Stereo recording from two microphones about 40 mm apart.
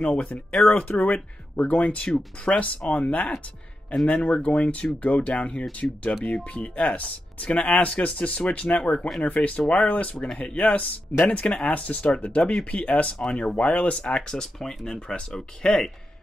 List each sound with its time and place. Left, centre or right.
0.0 s speech: left
11.6 s speech: left
12.0 s speech: left
13.2 s speech: left
13.9 s speech: left
14.9 s speech: left